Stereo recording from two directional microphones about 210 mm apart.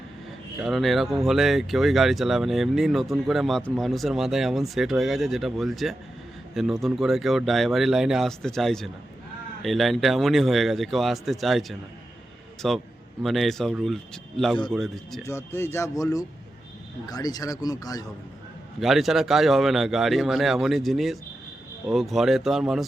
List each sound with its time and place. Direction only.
0.6 s speech: centre (ahead or behind)
15.2 s a man's voice: 10° left (ahead or behind)
18.8 s speech: centre (ahead or behind)